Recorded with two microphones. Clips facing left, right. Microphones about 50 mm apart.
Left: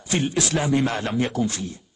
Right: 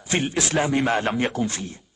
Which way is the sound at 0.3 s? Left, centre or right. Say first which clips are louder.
Left 1 dB; right.